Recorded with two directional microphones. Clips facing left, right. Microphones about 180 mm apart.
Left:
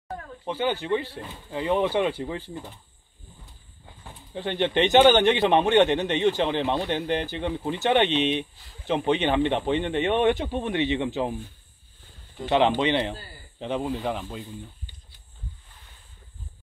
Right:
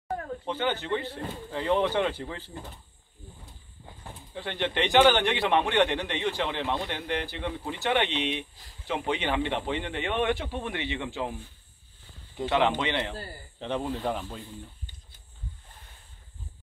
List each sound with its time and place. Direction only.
0.5 s speech: 10° left (ahead or behind)
4.3 s a man's voice: 20° left (ahead or behind)
12.4 s a man's voice: 20° left (ahead or behind)
13.6 s speech: 5° left (ahead or behind)